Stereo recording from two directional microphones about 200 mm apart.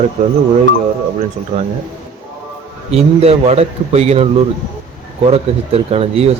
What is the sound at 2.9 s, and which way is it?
Speech, 30° right (ahead or behind).